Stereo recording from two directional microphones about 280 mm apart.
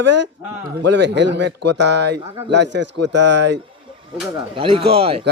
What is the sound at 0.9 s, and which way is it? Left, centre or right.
Speech, right.